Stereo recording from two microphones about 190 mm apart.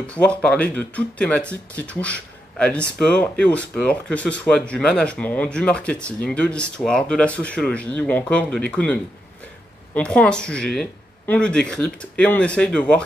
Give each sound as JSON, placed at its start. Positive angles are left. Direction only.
{"t": 0.0, "sound": "speech", "side_deg": 5}